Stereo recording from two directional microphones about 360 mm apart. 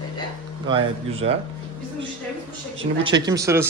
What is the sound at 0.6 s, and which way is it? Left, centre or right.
Speech, centre.